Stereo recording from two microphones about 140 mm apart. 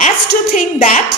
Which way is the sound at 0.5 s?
60° left (ahead or behind).